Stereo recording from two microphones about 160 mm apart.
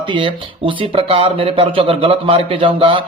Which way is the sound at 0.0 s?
30° right (ahead or behind).